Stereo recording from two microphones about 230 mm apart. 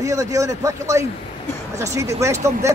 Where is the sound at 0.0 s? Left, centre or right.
Centre.